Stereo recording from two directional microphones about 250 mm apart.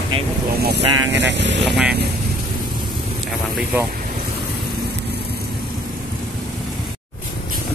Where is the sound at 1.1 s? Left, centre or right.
Right.